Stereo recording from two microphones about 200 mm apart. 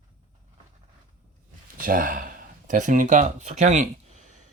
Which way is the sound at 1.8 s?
45° right (ahead or behind).